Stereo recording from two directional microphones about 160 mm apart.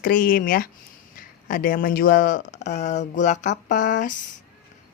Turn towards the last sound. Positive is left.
turn(degrees=55)  # may be behind; listen again after turning